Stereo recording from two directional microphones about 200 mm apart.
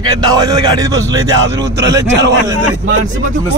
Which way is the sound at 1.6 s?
60° right (ahead or behind).